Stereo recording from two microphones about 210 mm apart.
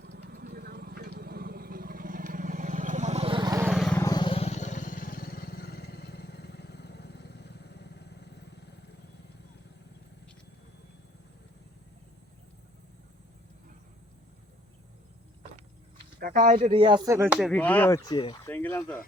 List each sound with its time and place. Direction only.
0.0 s vehicle: 55° right (ahead or behind); by 3.7 s 20° right (ahead or behind)
3.7 s vehicle: centre (ahead or behind)
3.9 s vehicle: 15° left (ahead or behind); by 8.8 s 55° left (ahead or behind)
16.2 s speech: 45° right (ahead or behind)
16.6 s speech: 25° right (ahead or behind); by 18.3 s 20° left (ahead or behind)
18.4 s speech: 10° left (ahead or behind)